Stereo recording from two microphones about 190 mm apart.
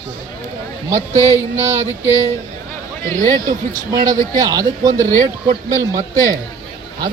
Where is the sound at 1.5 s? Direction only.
15° right (ahead or behind).